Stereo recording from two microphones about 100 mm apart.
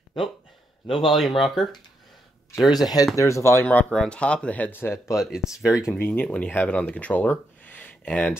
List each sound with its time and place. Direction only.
0.8 s speech: centre (ahead or behind)
2.7 s speech: 40° left (ahead or behind)
3.6 s speech: 10° left (ahead or behind); by 5.1 s 25° left (ahead or behind)
5.1 s speech: 5° right (ahead or behind)
5.9 s speech: 20° left (ahead or behind)